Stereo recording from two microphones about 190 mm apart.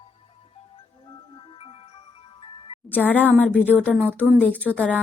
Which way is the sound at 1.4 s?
25° left (ahead or behind).